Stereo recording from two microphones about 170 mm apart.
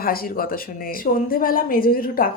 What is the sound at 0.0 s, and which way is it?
A woman's voice, 60° left (ahead or behind).